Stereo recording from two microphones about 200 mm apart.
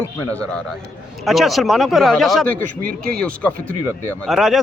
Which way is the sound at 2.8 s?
50° right (ahead or behind).